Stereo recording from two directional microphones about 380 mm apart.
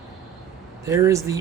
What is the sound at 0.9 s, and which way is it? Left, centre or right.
Speech, centre.